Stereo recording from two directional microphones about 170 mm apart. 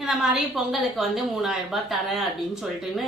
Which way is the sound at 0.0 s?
Centre (ahead or behind).